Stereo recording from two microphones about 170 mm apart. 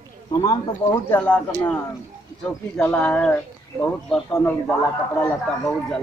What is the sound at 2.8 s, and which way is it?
Speech, 5° left (ahead or behind).